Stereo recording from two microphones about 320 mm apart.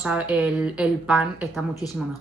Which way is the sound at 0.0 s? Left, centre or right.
Centre.